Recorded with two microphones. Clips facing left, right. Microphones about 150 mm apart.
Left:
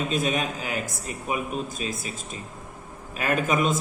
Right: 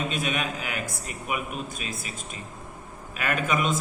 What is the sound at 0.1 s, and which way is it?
Speech, 35° left (ahead or behind).